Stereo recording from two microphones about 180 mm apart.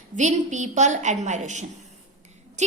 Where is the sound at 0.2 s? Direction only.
40° right (ahead or behind).